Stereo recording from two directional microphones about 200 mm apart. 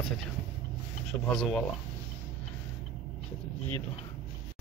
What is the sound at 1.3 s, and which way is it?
Speech, centre (ahead or behind).